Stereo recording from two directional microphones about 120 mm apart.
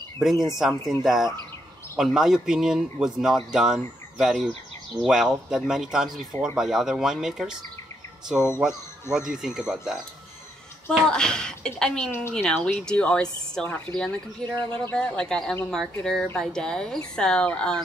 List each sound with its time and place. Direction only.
0.2 s speech: centre (ahead or behind)
9.3 s speech: 5° right (ahead or behind)
11.1 s speech: 5° left (ahead or behind)
12.1 s speech: 20° left (ahead or behind)
12.4 s speech: 5° left (ahead or behind)
14.5 s speech: 40° right (ahead or behind)
14.9 s speech: 10° left (ahead or behind)